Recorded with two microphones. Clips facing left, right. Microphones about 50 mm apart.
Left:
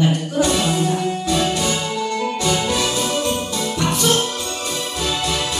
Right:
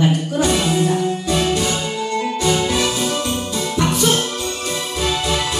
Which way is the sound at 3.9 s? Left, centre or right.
Right.